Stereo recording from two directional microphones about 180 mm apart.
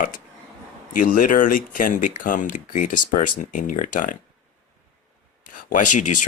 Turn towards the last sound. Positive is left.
turn(degrees=45)  # may be behind; listen again after turning